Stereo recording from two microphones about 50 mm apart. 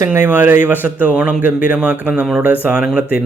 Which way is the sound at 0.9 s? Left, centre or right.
Right.